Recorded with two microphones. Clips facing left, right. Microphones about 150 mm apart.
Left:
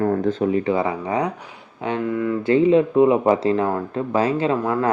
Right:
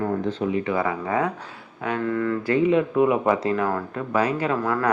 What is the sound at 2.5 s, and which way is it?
Speech, 30° left (ahead or behind).